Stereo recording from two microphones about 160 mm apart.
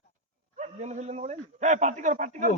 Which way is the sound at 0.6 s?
45° right (ahead or behind).